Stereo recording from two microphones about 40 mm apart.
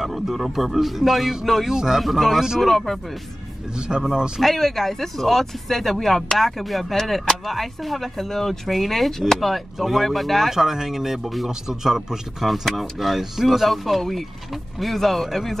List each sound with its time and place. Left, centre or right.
0.0 s speech: centre
1.7 s speech: centre
2.0 s speech: centre
3.7 s speech: right
4.4 s speech: centre
10.5 s speech: centre